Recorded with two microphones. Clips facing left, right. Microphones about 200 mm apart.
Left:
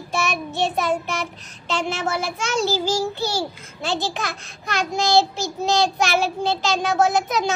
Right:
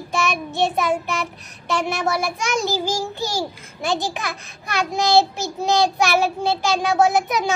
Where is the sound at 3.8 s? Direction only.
15° right (ahead or behind).